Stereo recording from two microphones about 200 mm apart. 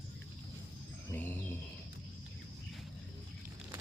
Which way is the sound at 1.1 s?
10° left (ahead or behind).